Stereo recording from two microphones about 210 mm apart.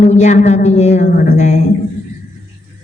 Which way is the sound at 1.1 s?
45° left (ahead or behind).